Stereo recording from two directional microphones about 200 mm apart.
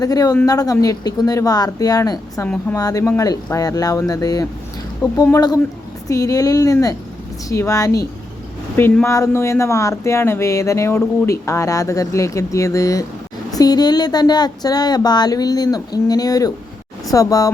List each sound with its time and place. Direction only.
0.0 s speech: 20° left (ahead or behind)